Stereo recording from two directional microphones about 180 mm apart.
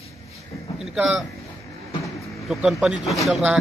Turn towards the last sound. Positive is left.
turn(degrees=0)  # may be behind; listen again after turning